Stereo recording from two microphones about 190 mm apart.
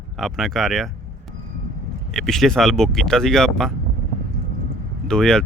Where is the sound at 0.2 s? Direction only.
Centre (ahead or behind).